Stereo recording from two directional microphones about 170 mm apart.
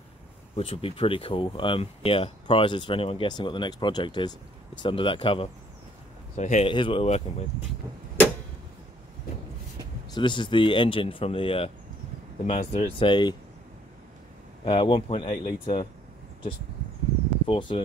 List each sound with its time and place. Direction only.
0.6 s speech: 35° left (ahead or behind)
6.3 s speech: 45° left (ahead or behind)
6.7 s speech: 30° left (ahead or behind)
10.1 s speech: 30° left (ahead or behind)
14.6 s speech: 30° left (ahead or behind)
17.5 s speech: 30° left (ahead or behind)